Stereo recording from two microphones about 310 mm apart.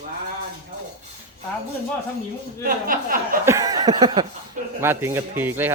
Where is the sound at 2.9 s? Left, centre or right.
Right.